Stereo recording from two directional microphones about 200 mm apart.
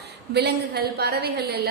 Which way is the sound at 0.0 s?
55° right (ahead or behind).